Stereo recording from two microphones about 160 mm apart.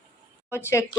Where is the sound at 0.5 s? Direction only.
15° left (ahead or behind).